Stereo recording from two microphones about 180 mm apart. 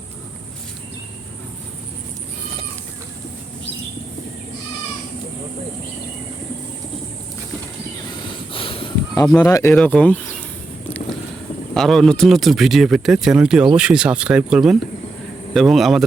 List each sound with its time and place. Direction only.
8.5 s a sound: 30° left (ahead or behind)
9.4 s speech: 15° left (ahead or behind)
9.7 s speech: 5° left (ahead or behind)
11.7 s speech: centre (ahead or behind)